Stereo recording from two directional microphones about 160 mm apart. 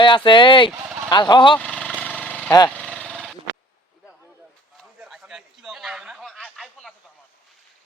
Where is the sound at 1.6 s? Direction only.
5° left (ahead or behind).